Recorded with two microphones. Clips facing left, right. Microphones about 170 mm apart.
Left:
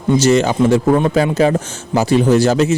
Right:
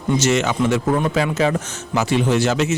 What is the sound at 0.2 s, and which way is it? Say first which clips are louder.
A man's voice: left 7 dB; 35° left (ahead or behind).